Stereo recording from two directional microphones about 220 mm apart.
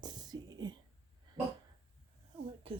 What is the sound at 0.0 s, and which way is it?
Whispering, 20° right (ahead or behind).